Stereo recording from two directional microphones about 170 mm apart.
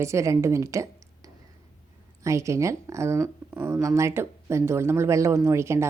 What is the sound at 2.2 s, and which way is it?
A woman's voice, 20° right (ahead or behind).